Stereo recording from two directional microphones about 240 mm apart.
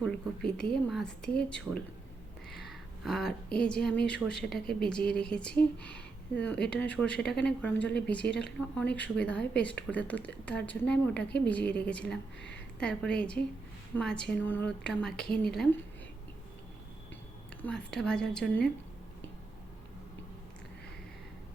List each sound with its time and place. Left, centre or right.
0.0 s speech: centre
12.4 s a sound: left
12.8 s speech: centre
17.9 s speech: centre